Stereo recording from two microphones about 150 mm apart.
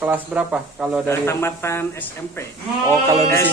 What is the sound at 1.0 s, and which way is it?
Speech, 15° left (ahead or behind).